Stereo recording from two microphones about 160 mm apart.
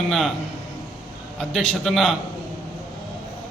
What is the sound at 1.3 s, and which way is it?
Speech, 5° left (ahead or behind).